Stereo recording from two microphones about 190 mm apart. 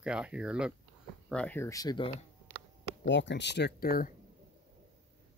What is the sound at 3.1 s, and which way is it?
Speech, 70° left (ahead or behind).